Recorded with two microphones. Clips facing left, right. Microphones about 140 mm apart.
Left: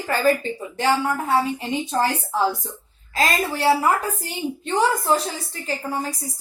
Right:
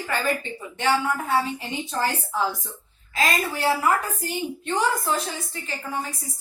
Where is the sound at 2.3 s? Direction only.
35° left (ahead or behind).